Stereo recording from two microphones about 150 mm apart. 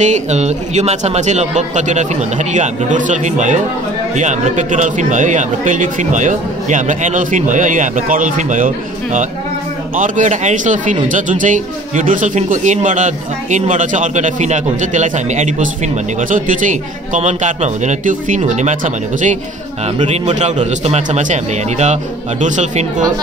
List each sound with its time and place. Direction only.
0.0 s a man's voice: 50° right (ahead or behind)